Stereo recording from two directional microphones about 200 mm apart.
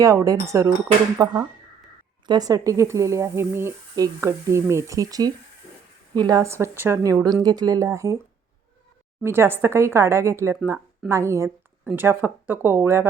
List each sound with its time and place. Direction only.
0.0 s speech: 15° right (ahead or behind)
9.2 s speech: 10° right (ahead or behind)